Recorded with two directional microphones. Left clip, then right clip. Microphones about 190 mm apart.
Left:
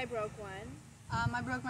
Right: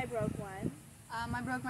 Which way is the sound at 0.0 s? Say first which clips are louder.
Right 1 dB; 25° left (ahead or behind).